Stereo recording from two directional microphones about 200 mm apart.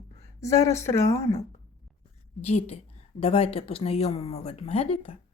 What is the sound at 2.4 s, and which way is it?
Speech, 30° left (ahead or behind).